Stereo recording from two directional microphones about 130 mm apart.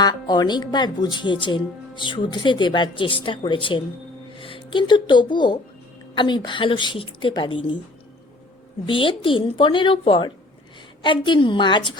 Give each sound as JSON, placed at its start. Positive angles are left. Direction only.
{"t": 0.0, "sound": "speech", "side_deg": 30}
{"t": 8.9, "sound": "speech", "side_deg": 40}